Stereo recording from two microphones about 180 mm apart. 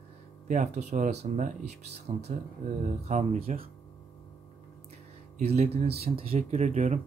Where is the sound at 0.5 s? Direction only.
40° right (ahead or behind).